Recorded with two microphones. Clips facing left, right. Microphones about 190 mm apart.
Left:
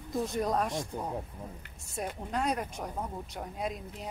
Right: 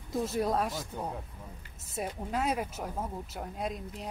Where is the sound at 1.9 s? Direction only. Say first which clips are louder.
Right 1 dB; 5° right (ahead or behind).